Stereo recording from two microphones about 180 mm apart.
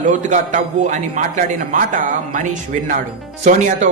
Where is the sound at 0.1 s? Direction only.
40° right (ahead or behind).